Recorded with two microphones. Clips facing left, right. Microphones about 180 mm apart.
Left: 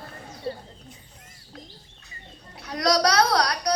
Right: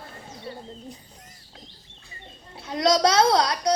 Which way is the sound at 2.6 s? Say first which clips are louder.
Right 2 dB; 25° right (ahead or behind).